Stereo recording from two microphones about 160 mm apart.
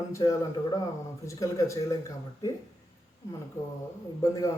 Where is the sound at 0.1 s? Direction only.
20° left (ahead or behind).